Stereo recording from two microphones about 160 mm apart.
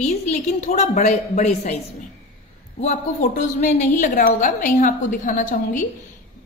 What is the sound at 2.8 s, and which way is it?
A woman's voice, 50° left (ahead or behind).